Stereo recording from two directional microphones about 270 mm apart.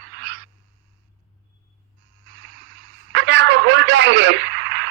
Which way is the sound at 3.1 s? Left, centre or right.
Right.